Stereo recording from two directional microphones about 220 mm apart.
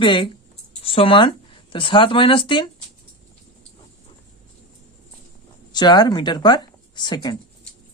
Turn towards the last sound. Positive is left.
turn(degrees=20)  # may be behind; listen again after turning